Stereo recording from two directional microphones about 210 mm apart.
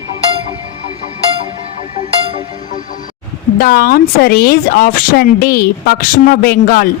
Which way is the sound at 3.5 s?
45° left (ahead or behind).